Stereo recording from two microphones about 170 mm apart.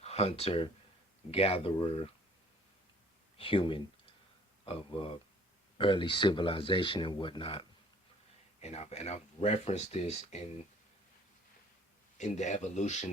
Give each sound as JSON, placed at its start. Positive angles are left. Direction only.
{"t": 0.0, "sound": "speech", "side_deg": 40}
{"t": 3.3, "sound": "speech", "side_deg": 30}
{"t": 8.6, "sound": "speech", "side_deg": 40}
{"t": 12.1, "sound": "speech", "side_deg": 45}